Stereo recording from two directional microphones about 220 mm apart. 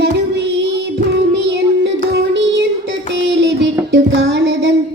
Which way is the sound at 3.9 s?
50° right (ahead or behind).